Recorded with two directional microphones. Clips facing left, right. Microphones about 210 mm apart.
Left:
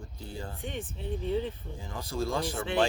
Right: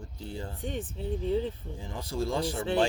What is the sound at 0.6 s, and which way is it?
Speech, 40° right (ahead or behind).